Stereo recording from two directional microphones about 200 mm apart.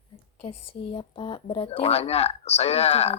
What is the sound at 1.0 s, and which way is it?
Speech, 25° left (ahead or behind).